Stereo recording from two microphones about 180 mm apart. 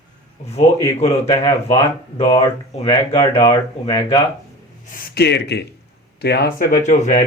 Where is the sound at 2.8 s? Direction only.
30° left (ahead or behind).